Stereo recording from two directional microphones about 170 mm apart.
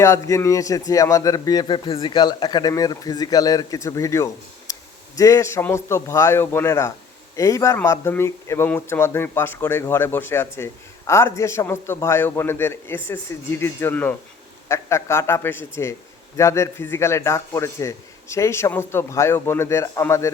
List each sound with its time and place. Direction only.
0.0 s a man's voice: 15° left (ahead or behind)